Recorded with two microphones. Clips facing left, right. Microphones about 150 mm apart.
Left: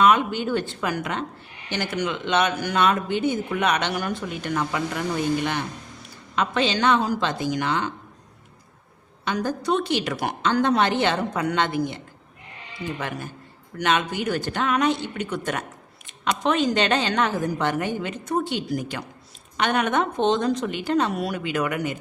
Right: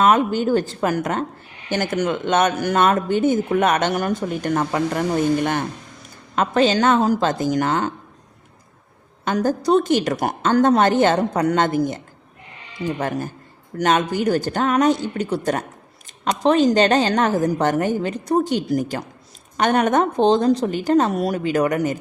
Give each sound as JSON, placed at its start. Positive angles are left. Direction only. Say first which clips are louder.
{"t": 0.0, "sound": "a woman's voice", "louder": "right 3 dB", "side_deg": -40}
{"t": 9.2, "sound": "a man's voice", "louder": "right 6 dB", "side_deg": -45}